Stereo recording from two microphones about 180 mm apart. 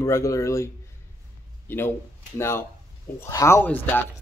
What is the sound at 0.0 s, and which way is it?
Speech, 15° left (ahead or behind).